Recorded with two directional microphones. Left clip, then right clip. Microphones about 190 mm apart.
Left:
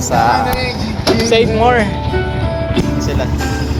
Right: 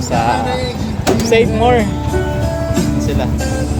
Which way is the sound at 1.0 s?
5° right (ahead or behind).